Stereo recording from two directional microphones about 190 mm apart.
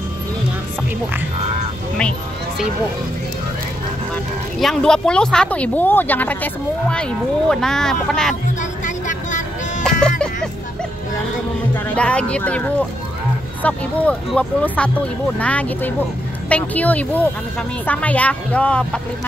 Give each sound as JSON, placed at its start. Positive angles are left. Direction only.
{"t": 4.1, "sound": "speech", "side_deg": 0}
{"t": 8.8, "sound": "vehicle", "side_deg": 40}
{"t": 9.8, "sound": "music", "side_deg": 5}
{"t": 11.7, "sound": "speech", "side_deg": 5}